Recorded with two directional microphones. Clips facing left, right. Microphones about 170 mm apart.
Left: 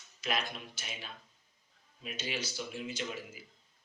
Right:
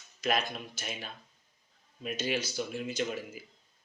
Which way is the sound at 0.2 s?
45° right (ahead or behind).